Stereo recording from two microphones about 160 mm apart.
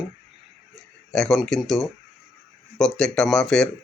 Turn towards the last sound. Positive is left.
turn(degrees=5)  # may be behind; listen again after turning